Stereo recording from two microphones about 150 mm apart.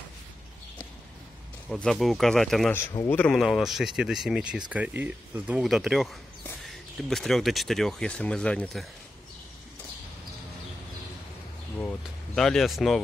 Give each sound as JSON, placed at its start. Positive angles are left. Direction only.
{"t": 1.7, "sound": "speech", "side_deg": 0}
{"t": 3.3, "sound": "speech", "side_deg": 0}
{"t": 12.4, "sound": "speech", "side_deg": 0}